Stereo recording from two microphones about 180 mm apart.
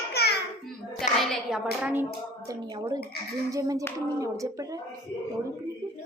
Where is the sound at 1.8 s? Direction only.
10° right (ahead or behind).